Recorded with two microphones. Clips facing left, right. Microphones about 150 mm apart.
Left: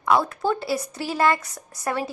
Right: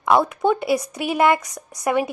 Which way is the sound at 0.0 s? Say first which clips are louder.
Right 4 dB; 20° right (ahead or behind).